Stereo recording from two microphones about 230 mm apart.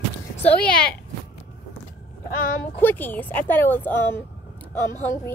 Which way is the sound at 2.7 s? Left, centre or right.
Centre.